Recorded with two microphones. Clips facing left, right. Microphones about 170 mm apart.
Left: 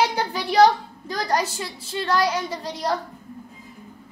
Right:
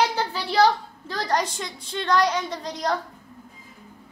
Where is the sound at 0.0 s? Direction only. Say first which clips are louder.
Left 1 dB; 15° left (ahead or behind).